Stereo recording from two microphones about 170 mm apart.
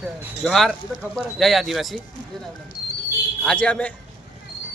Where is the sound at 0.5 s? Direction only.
Centre (ahead or behind).